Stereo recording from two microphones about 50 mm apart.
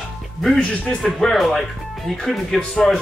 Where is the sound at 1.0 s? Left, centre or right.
Centre.